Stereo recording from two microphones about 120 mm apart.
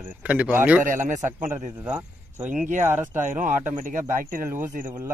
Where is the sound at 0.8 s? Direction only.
90° right.